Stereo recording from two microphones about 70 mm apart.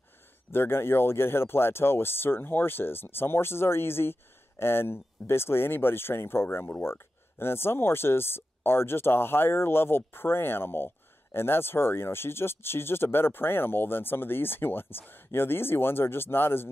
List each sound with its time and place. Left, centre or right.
0.5 s speech: left